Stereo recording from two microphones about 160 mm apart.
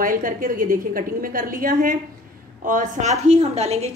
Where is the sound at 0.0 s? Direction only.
60° right (ahead or behind).